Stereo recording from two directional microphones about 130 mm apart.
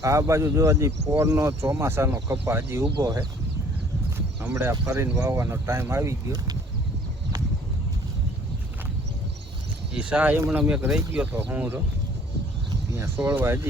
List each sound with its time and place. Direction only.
0.0 s speech: 25° right (ahead or behind)
3.0 s speech: 30° right (ahead or behind)
4.5 s speech: 25° right (ahead or behind)
9.9 s speech: 10° right (ahead or behind)
13.0 s speech: 20° right (ahead or behind)